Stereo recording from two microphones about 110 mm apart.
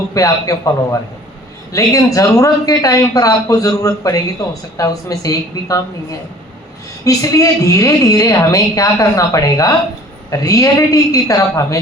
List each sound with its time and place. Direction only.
0.1 s a man's voice: 30° left (ahead or behind)